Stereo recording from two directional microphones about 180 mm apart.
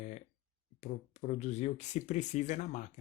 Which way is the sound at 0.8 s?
40° left (ahead or behind).